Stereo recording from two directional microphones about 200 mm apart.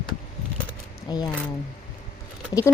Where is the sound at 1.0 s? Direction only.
20° left (ahead or behind).